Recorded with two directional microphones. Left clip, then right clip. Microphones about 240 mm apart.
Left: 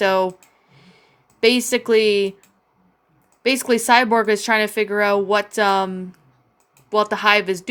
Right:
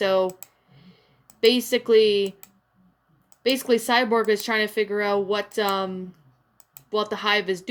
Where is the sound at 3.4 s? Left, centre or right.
Left.